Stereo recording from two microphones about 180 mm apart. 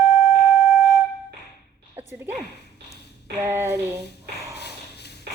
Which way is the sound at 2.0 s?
10° right (ahead or behind).